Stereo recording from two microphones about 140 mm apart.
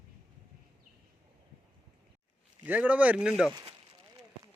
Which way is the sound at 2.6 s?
10° right (ahead or behind).